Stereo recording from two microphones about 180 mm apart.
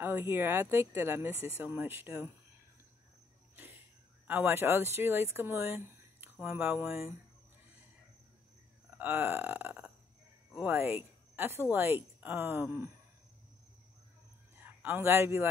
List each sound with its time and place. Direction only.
0.0 s speech: 10° right (ahead or behind)
3.5 s a sound: 10° right (ahead or behind)
4.3 s speech: 10° right (ahead or behind)
8.9 s burping: 10° right (ahead or behind)
10.5 s speech: 10° right (ahead or behind)
14.5 s a sound: 10° right (ahead or behind)